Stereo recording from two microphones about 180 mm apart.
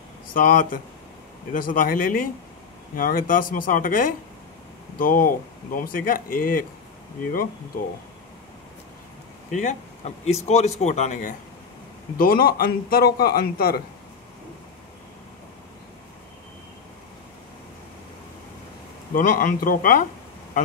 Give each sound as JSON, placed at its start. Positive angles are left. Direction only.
{"t": 0.3, "sound": "speech", "side_deg": 50}
{"t": 9.5, "sound": "a man's voice", "side_deg": 45}
{"t": 19.1, "sound": "speech", "side_deg": 50}